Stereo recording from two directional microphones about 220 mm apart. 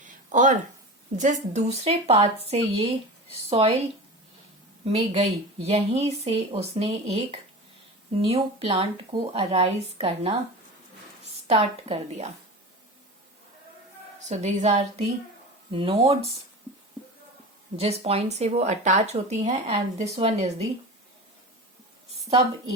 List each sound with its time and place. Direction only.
0.0 s a sound: 35° right (ahead or behind)
1.1 s a woman's voice: 35° right (ahead or behind)
4.9 s a woman's voice: 30° right (ahead or behind)
11.4 s a woman's voice: 25° right (ahead or behind)
14.3 s a woman's voice: 30° right (ahead or behind)
17.7 s a woman's voice: 25° right (ahead or behind)